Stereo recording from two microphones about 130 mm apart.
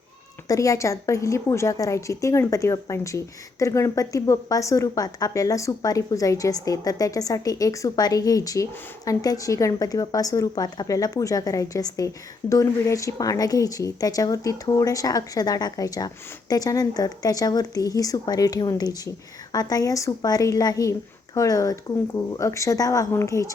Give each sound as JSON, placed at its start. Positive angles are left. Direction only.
{"t": 0.4, "sound": "speech", "side_deg": 25}